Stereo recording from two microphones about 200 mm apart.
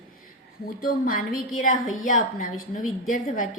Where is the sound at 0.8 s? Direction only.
45° left (ahead or behind).